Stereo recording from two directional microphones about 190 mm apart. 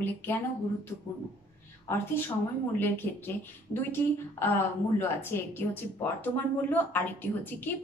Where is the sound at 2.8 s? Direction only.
10° left (ahead or behind).